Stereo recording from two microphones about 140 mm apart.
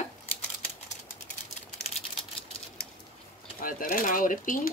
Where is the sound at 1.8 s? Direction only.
50° left (ahead or behind).